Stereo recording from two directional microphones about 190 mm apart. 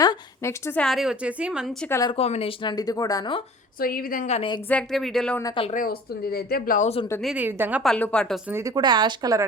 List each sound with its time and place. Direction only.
0.0 s a woman's voice: 15° left (ahead or behind); by 1.9 s 5° right (ahead or behind)
1.9 s speech: 20° left (ahead or behind)
2.1 s speech: 30° left (ahead or behind)
3.8 s speech: 50° left (ahead or behind)
4.4 s speech: 25° left (ahead or behind)
4.7 s speech: 5° left (ahead or behind)
5.4 s speech: 20° left (ahead or behind)
5.6 s speech: 45° left (ahead or behind)
7.2 s a woman's voice: 5° right (ahead or behind)
7.9 s speech: 5° left (ahead or behind)
8.4 s speech: 15° right (ahead or behind)